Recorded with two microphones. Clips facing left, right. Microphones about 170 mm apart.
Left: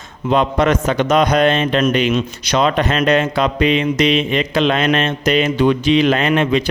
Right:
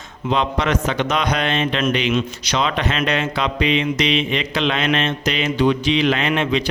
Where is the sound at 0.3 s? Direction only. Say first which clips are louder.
Left 5 dB; 50° left (ahead or behind).